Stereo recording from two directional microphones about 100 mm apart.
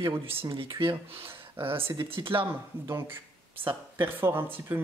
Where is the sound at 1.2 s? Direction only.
20° right (ahead or behind).